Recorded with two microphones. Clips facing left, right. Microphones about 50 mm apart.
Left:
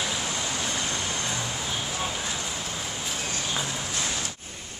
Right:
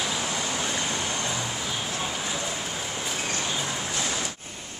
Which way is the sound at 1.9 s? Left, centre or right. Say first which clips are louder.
Even; centre.